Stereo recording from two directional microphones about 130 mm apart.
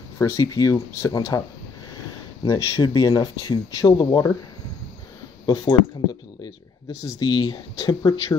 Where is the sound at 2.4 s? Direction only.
30° left (ahead or behind).